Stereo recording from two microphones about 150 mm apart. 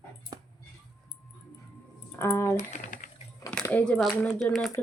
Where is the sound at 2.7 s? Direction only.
55° left (ahead or behind).